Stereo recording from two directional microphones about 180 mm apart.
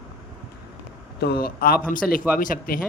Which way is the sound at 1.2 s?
60° left (ahead or behind).